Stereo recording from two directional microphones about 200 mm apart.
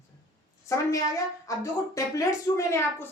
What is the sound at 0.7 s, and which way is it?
A woman's voice, 15° left (ahead or behind).